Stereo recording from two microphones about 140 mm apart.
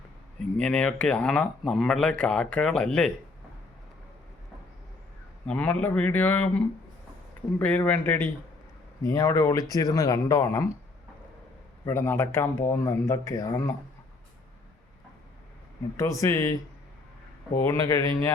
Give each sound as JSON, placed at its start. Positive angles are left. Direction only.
{"t": 0.5, "sound": "speech", "side_deg": 5}
{"t": 5.5, "sound": "speech", "side_deg": 10}
{"t": 7.6, "sound": "speech", "side_deg": 10}
{"t": 11.9, "sound": "speech", "side_deg": 15}
{"t": 16.0, "sound": "speech", "side_deg": 25}
{"t": 17.7, "sound": "speech", "side_deg": 25}